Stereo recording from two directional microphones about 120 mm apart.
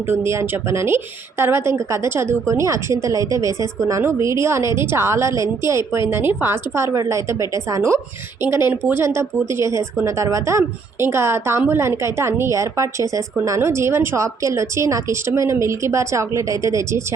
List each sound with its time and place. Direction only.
0.1 s a woman's voice: 25° right (ahead or behind)